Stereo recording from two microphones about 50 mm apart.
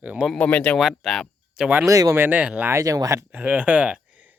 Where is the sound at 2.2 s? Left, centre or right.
Right.